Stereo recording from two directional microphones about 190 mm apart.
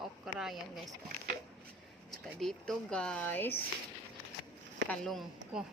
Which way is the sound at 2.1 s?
Centre (ahead or behind).